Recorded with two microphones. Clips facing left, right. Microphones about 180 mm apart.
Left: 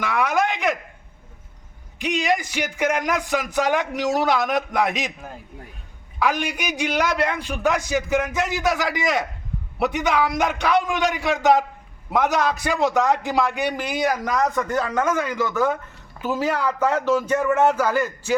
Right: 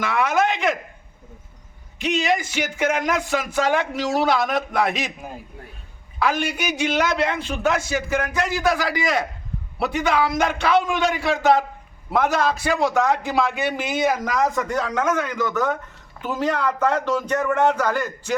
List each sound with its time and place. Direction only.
0.0 s speech: 15° left (ahead or behind)
2.0 s speech: 15° left (ahead or behind)
6.1 s speech: 15° left (ahead or behind)
14.1 s speech: centre (ahead or behind)